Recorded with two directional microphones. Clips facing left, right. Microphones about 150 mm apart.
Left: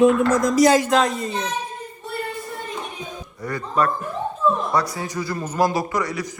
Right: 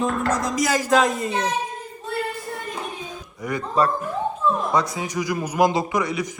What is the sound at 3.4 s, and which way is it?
Speech, 15° right (ahead or behind).